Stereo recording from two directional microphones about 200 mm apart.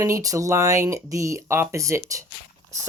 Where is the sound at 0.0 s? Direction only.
15° right (ahead or behind).